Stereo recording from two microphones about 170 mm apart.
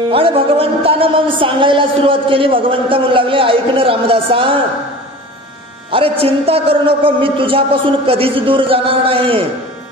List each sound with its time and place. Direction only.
0.1 s speech: 35° right (ahead or behind)
5.9 s speech: 35° right (ahead or behind)